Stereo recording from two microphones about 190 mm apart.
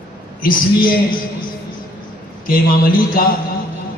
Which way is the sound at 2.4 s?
50° left (ahead or behind).